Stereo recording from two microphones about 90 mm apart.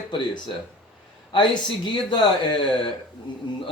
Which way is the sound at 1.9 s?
65° left (ahead or behind).